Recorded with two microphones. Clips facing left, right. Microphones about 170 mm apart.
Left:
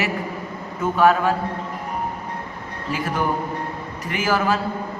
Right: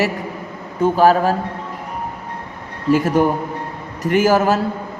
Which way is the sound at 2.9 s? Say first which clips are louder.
Right 7 dB; 45° right (ahead or behind).